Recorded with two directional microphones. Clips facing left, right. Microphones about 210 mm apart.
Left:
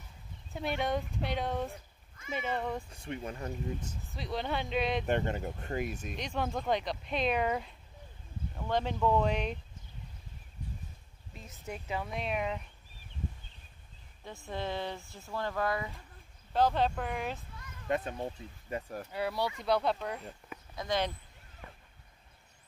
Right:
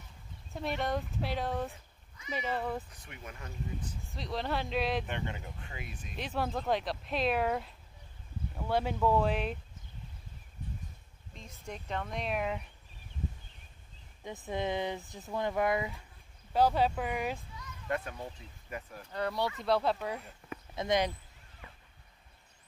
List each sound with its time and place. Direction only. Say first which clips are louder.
0.5 s speech: left 1 dB; centre (ahead or behind)
2.9 s speech: left 9 dB; 30° left (ahead or behind)
4.0 s speech: right 1 dB; centre (ahead or behind)
5.0 s speech: left 8 dB; 40° left (ahead or behind)
6.1 s speech: right 2 dB; 5° right (ahead or behind)
11.3 s speech: left 1 dB; 5° left (ahead or behind)
14.2 s speech: right 3 dB; 15° right (ahead or behind)
16.5 s speech: right 1 dB; 10° right (ahead or behind)
17.8 s speech: left 3 dB; 20° left (ahead or behind)
19.1 s speech: right 1 dB; 5° left (ahead or behind)
20.7 s speech: right 3 dB; 25° right (ahead or behind)